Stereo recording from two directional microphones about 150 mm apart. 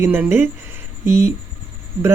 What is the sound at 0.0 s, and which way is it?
A woman's voice, 15° right (ahead or behind).